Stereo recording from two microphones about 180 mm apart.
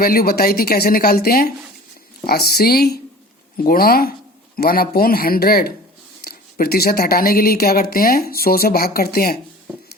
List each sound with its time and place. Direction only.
0.0 s speech: 55° left (ahead or behind)